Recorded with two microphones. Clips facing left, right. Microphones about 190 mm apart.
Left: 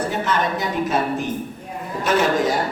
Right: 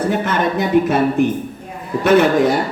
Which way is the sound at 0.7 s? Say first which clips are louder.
Right 10 dB; 55° right (ahead or behind).